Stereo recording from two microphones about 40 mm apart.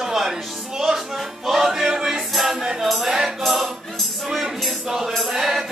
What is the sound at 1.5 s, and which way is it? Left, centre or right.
Music, centre.